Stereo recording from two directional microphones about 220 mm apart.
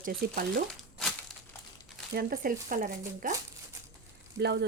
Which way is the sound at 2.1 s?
40° right (ahead or behind).